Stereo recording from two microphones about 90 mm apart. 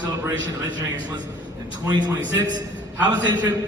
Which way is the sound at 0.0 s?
50° right (ahead or behind).